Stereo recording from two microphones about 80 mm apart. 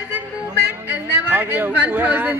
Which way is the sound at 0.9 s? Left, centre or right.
Right.